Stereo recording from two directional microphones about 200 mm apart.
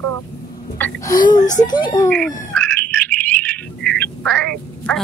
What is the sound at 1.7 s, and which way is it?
Speech, 20° left (ahead or behind).